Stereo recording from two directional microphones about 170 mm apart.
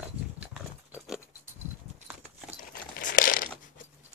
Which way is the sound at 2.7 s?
55° left (ahead or behind).